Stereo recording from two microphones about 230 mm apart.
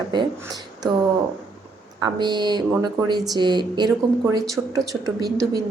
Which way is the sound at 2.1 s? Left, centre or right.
Centre.